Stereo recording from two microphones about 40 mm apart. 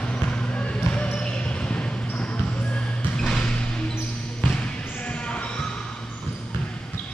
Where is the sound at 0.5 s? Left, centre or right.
Left.